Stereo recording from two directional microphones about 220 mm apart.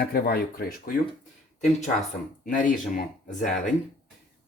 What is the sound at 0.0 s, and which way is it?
Speech, 45° left (ahead or behind).